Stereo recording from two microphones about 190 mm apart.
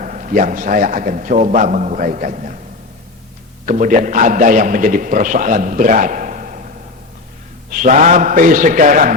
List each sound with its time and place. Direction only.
0.0 s a man's voice: 40° right (ahead or behind)
3.7 s a man's voice: 45° right (ahead or behind)
7.7 s a man's voice: 45° right (ahead or behind)